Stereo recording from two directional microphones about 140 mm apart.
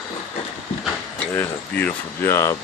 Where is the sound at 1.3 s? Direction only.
10° left (ahead or behind).